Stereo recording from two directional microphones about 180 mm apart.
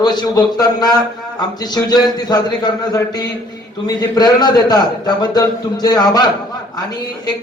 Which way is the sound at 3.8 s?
20° left (ahead or behind).